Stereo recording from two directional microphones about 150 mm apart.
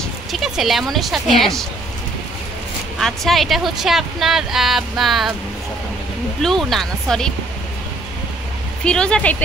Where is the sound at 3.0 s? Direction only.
Centre (ahead or behind).